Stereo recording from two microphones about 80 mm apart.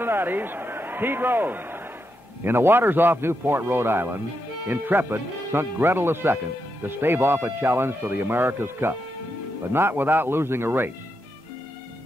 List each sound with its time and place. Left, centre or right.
0.0 s a man's voice: right